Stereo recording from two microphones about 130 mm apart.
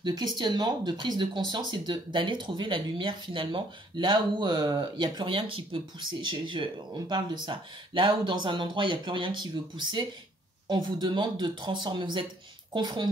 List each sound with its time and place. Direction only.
0.0 s speech: 35° right (ahead or behind)